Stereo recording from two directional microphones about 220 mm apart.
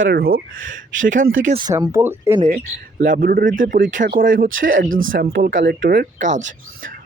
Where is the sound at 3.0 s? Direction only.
40° right (ahead or behind).